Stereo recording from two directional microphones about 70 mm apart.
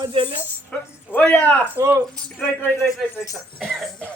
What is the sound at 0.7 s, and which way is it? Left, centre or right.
Speech, centre.